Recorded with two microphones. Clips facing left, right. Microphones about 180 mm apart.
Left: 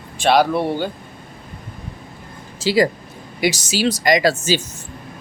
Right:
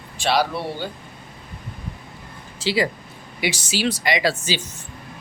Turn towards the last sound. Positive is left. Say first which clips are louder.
# left 6 dB
turn(degrees=45)  # may be behind; listen again after turning